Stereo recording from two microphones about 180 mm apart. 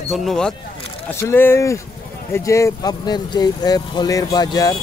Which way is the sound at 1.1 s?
15° left (ahead or behind).